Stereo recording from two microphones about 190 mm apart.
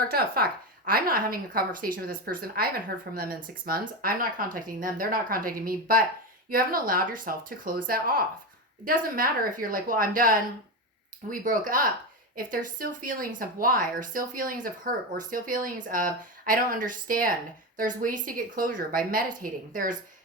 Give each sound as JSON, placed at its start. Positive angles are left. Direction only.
{"t": 0.1, "sound": "a woman's voice", "side_deg": -55}